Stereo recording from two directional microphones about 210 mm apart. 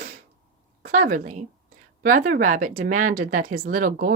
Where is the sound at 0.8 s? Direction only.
40° right (ahead or behind).